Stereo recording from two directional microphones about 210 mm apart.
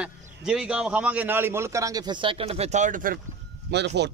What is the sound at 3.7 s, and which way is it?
Speech, 55° right (ahead or behind).